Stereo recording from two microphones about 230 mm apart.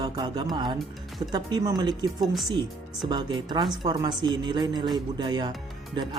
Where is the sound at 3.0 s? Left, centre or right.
Centre.